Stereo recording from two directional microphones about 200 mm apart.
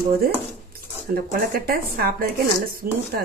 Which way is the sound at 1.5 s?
45° right (ahead or behind).